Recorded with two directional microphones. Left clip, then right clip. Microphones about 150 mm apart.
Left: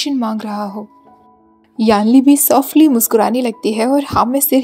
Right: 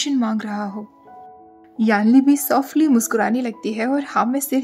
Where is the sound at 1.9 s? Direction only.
15° left (ahead or behind).